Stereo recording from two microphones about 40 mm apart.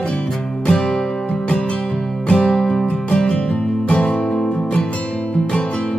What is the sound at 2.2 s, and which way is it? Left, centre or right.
Music, left.